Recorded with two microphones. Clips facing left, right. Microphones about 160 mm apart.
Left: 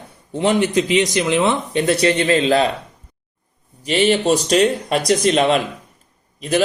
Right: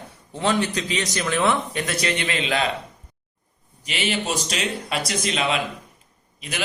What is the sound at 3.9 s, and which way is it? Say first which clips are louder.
A man's voice: left 10 dB; 40° left (ahead or behind).